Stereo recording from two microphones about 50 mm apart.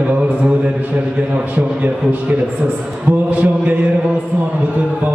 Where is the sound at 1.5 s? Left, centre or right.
Right.